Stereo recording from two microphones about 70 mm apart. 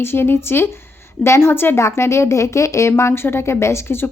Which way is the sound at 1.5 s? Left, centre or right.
Left.